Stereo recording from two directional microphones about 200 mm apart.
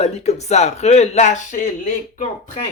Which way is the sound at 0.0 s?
35° left (ahead or behind).